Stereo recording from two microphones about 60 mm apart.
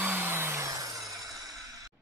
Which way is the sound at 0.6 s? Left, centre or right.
Right.